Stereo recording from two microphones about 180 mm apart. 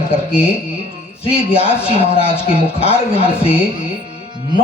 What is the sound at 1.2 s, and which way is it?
Speech, 35° left (ahead or behind).